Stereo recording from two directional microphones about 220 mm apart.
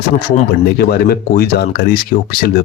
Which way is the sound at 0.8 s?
45° left (ahead or behind).